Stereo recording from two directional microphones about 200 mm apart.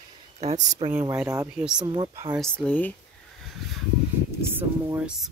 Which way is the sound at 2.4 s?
5° left (ahead or behind).